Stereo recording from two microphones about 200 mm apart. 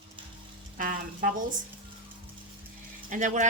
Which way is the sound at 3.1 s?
40° right (ahead or behind).